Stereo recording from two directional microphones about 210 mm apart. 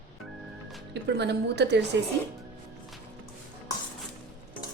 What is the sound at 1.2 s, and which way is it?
Speech, 55° right (ahead or behind).